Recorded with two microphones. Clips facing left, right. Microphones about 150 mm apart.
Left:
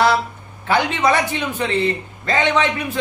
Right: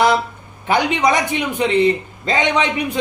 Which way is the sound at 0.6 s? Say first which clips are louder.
Right 1 dB; 15° right (ahead or behind).